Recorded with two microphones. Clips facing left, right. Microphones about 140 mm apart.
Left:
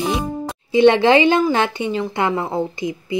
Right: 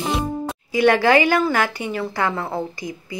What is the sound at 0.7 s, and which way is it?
A woman's voice, 25° left (ahead or behind).